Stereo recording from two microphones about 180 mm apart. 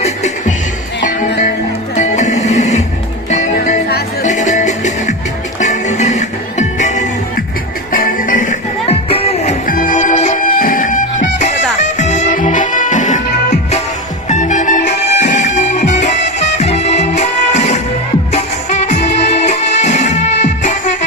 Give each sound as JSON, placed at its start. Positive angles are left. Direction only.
{"t": 0.0, "sound": "music", "side_deg": 40}
{"t": 2.0, "sound": "music", "side_deg": 40}
{"t": 14.3, "sound": "music", "side_deg": 40}